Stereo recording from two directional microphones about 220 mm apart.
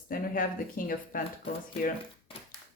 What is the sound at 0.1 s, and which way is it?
Speech, 40° left (ahead or behind).